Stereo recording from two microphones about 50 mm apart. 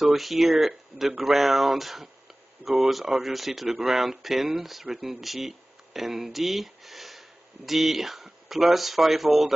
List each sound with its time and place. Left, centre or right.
0.0 s speech: centre